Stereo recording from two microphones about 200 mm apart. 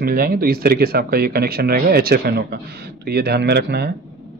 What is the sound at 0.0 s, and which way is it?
Speech, 45° right (ahead or behind).